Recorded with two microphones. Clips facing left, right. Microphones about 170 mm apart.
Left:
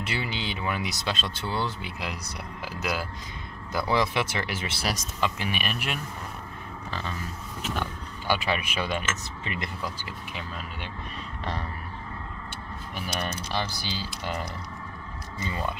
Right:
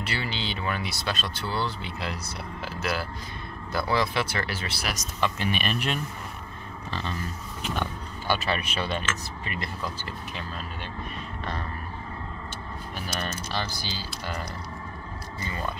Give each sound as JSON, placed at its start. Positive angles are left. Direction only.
{"t": 0.0, "sound": "speech", "side_deg": 15}
{"t": 8.3, "sound": "speech", "side_deg": 10}
{"t": 13.2, "sound": "speech", "side_deg": 15}